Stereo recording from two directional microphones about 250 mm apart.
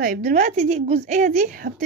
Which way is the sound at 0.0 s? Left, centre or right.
Right.